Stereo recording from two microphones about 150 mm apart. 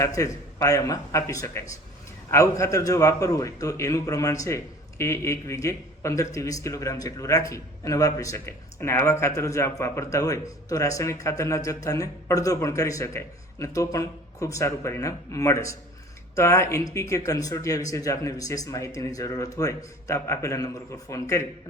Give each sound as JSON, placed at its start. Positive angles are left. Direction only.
{"t": 0.0, "sound": "a man's voice", "side_deg": 20}